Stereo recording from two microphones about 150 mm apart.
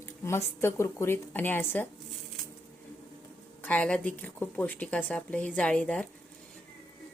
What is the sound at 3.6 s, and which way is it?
Speech, 5° left (ahead or behind).